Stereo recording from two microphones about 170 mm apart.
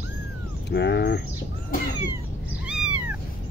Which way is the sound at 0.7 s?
85° left.